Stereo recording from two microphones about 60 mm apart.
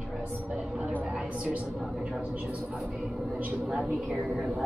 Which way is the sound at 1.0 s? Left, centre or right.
Centre.